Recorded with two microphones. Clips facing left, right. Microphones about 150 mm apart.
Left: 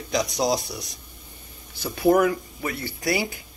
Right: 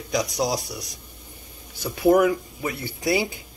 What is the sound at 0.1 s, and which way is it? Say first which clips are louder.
Speech: left 1 dB; 10° right (ahead or behind).